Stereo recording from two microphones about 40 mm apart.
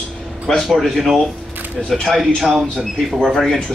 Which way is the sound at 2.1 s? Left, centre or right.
Centre.